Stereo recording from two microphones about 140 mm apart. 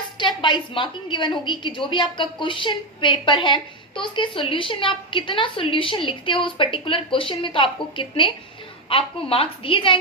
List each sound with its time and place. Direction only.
0.2 s a woman's voice: 35° left (ahead or behind)